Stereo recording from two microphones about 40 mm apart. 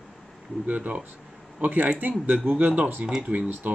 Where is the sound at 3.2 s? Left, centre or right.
Right.